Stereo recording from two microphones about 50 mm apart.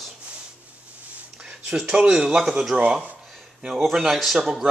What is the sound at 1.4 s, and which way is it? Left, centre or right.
A man's voice, centre.